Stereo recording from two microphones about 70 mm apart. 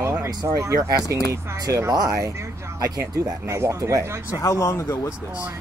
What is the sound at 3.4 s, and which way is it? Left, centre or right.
Speech, right.